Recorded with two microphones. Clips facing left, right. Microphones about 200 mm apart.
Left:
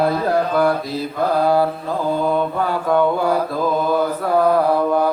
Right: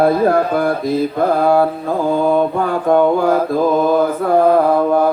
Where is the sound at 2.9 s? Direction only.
45° right (ahead or behind).